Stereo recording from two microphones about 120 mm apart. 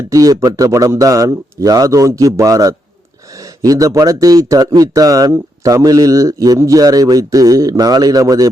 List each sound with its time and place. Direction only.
0.1 s speech: 30° right (ahead or behind)